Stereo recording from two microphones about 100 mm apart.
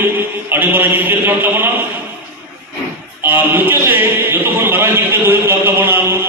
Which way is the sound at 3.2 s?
20° right (ahead or behind).